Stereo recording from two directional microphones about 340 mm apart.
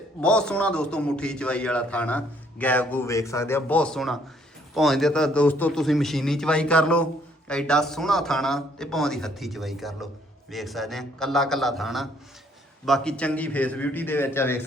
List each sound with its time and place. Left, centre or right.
0.2 s a man's voice: centre